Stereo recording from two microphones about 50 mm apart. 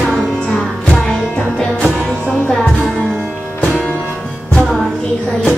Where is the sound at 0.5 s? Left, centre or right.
Centre.